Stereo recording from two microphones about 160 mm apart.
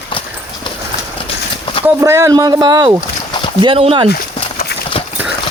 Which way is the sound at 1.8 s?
20° right (ahead or behind).